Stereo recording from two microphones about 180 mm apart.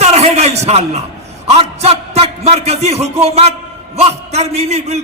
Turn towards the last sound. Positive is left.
turn(degrees=-35)  # may be behind; listen again after turning